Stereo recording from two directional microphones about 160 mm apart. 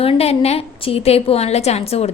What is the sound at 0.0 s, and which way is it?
A woman's voice, 40° left (ahead or behind).